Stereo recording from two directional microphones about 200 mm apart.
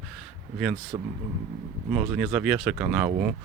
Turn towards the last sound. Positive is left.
turn(degrees=-5)  # may be behind; listen again after turning